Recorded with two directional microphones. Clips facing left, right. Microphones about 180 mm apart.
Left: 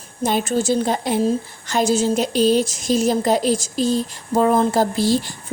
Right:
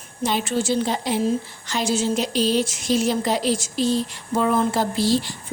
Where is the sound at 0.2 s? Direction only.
50° left (ahead or behind).